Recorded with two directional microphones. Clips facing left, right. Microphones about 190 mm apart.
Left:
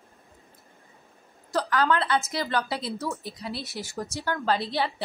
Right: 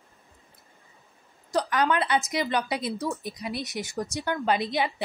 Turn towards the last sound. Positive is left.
turn(degrees=-15)  # may be behind; listen again after turning